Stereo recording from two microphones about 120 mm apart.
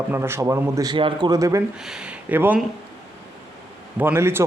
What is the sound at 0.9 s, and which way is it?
Speech, 40° right (ahead or behind).